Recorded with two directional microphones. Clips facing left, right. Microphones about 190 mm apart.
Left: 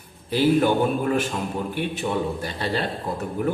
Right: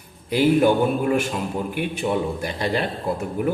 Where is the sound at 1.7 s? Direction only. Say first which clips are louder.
Right 3 dB; 15° right (ahead or behind).